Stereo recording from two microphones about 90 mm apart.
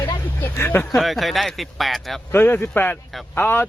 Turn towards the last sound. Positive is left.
turn(degrees=25)  # may be behind; listen again after turning